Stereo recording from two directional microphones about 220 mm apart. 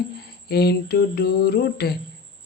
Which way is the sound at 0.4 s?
45° left (ahead or behind).